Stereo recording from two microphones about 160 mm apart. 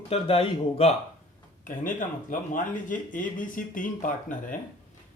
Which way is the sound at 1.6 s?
55° left (ahead or behind).